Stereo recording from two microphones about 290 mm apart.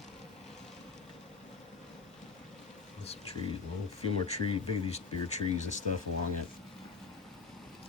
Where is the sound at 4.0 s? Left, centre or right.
Left.